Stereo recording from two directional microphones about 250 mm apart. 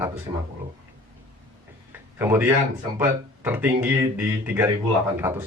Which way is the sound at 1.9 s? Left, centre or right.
Centre.